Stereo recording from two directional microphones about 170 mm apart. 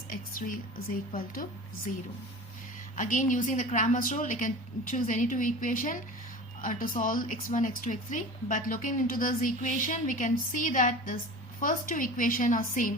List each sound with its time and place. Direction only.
0.1 s a woman's voice: 55° left (ahead or behind)
3.0 s a woman's voice: 50° left (ahead or behind)